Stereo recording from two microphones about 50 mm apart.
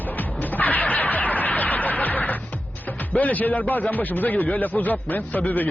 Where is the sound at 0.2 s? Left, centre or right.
Left.